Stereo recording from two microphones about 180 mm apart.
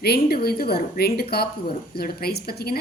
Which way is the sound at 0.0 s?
60° left (ahead or behind).